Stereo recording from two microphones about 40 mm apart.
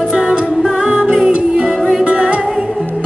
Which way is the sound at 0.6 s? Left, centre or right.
Centre.